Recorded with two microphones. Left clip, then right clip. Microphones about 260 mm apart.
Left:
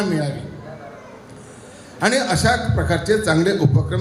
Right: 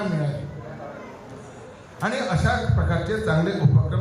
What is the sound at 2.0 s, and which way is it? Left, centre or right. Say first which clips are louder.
A man's voice: left 7 dB; left.